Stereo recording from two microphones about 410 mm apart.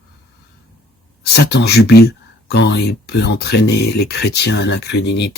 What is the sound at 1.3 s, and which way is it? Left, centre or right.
Speech, left.